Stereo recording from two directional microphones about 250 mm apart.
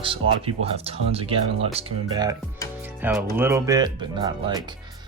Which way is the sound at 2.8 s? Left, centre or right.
Centre.